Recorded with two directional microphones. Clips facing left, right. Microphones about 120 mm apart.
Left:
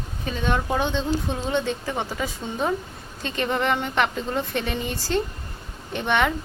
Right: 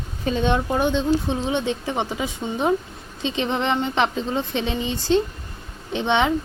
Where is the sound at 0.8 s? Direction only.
15° right (ahead or behind).